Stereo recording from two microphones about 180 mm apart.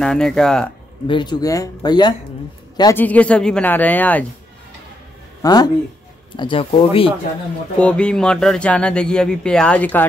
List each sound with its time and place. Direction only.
0.0 s speech: 5° left (ahead or behind)
1.0 s speech: 25° left (ahead or behind)
2.8 s speech: 15° left (ahead or behind)
5.4 s speech: 20° left (ahead or behind)
7.8 s speech: 5° left (ahead or behind)